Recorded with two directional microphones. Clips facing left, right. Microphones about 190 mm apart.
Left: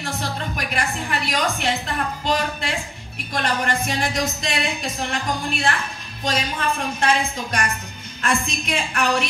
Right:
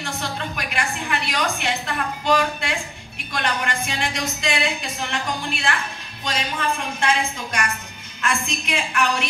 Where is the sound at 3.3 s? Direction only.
40° left (ahead or behind).